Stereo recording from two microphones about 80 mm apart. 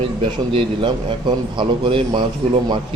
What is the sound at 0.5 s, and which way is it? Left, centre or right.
A man's voice, right.